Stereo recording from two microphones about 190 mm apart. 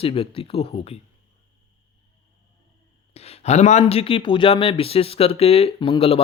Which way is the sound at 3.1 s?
35° left (ahead or behind).